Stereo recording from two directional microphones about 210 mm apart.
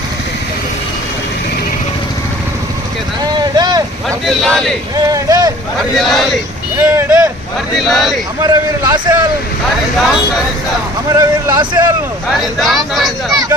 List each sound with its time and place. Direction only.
3.5 s vehicle: 20° right (ahead or behind)
4.3 s speech: centre (ahead or behind)
4.9 s speech: 15° right (ahead or behind)
6.0 s speech: centre (ahead or behind)
6.9 s a man's voice: 15° right (ahead or behind)
7.8 s speech: centre (ahead or behind)
8.4 s a man's voice: 15° right (ahead or behind)
10.0 s speech: centre (ahead or behind)
11.2 s a man's voice: 15° right (ahead or behind)
12.3 s speech: centre (ahead or behind)